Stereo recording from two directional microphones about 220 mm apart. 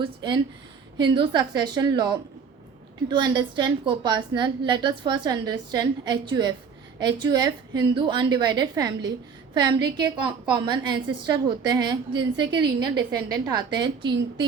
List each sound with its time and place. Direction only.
0.0 s a woman's voice: 20° right (ahead or behind)